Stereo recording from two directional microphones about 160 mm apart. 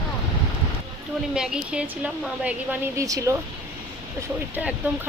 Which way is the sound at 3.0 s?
20° right (ahead or behind).